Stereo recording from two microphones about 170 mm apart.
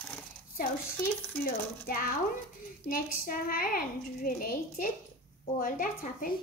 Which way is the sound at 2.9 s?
55° left (ahead or behind).